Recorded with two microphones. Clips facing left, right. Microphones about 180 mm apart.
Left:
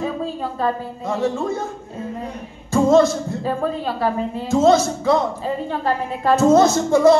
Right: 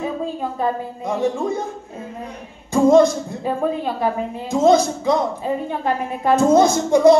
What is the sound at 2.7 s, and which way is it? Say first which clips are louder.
Speech: right 1 dB; 15° right (ahead or behind).